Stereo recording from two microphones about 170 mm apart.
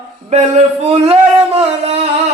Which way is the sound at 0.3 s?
40° right (ahead or behind).